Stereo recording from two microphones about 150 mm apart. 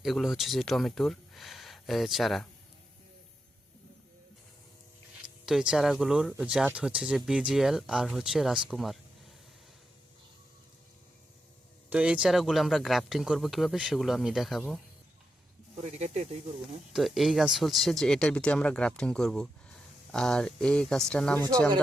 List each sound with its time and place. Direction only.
0.0 s speech: centre (ahead or behind)
5.5 s speech: 5° right (ahead or behind)
11.9 s speech: 5° right (ahead or behind)
15.8 s speech: 50° right (ahead or behind)
16.9 s speech: centre (ahead or behind)